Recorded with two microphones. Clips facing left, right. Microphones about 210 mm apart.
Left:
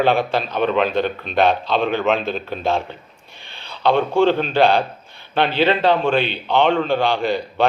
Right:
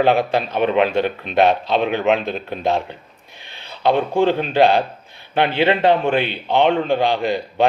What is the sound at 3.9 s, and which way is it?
Speech, 15° right (ahead or behind).